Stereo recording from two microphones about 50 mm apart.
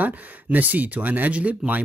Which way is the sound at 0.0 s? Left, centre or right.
Right.